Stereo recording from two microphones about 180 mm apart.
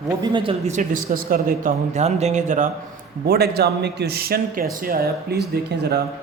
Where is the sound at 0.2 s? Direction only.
30° right (ahead or behind).